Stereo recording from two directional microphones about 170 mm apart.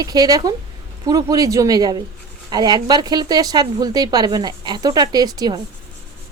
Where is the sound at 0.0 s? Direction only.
20° right (ahead or behind).